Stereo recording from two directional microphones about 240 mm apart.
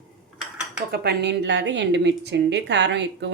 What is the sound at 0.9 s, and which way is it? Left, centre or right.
A woman's voice, right.